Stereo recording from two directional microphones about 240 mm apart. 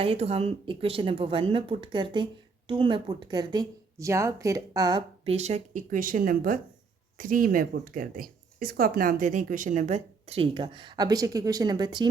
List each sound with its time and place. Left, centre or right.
0.0 s speech: right